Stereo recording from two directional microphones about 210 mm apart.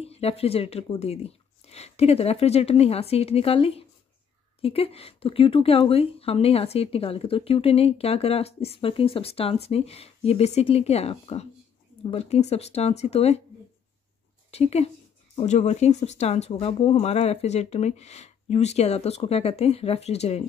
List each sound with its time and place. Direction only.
0.0 s a woman's voice: 30° left (ahead or behind)
14.5 s speech: 30° left (ahead or behind)